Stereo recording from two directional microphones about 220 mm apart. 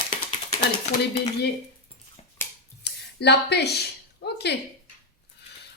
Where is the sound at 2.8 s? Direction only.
50° left (ahead or behind).